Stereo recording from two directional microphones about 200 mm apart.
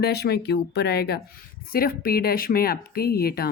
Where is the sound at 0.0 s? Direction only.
55° left (ahead or behind).